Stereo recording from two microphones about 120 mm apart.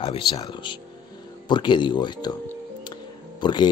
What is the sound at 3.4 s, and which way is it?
Speech, 40° left (ahead or behind).